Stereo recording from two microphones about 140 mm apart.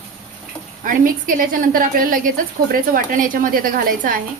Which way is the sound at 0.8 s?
75° right (ahead or behind).